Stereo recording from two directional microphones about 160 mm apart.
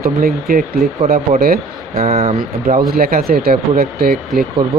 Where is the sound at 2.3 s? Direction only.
65° right (ahead or behind).